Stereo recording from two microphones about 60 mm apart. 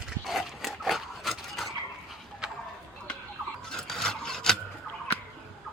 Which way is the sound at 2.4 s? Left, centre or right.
Centre.